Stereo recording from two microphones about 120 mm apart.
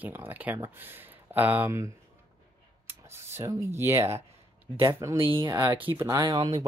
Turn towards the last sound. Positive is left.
turn(degrees=-35)  # may be behind; listen again after turning